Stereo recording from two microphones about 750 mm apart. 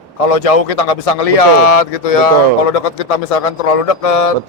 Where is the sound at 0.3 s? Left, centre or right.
Left.